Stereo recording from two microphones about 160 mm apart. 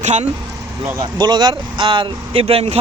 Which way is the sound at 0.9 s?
25° right (ahead or behind).